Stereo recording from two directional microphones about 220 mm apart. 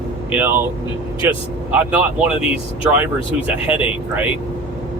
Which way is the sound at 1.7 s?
5° right (ahead or behind).